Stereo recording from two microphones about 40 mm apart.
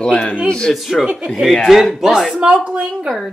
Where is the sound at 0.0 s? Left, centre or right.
Left.